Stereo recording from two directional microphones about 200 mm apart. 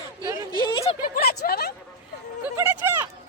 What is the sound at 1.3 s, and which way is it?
Speech, 50° left (ahead or behind).